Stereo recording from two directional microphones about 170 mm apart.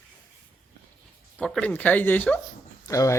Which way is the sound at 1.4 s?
5° left (ahead or behind).